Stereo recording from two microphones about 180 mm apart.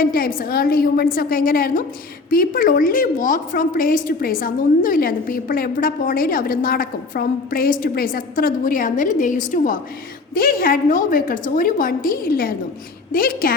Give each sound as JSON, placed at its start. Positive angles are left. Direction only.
{"t": 0.0, "sound": "a woman's voice", "side_deg": 55}